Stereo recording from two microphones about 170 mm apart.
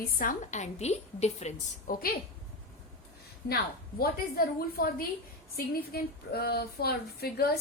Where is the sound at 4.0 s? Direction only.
60° left (ahead or behind).